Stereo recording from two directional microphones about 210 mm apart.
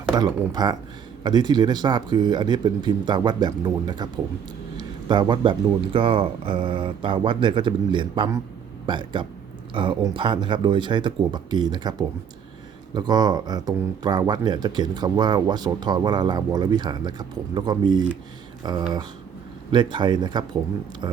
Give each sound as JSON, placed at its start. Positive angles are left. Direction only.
{"t": 0.2, "sound": "speech", "side_deg": -20}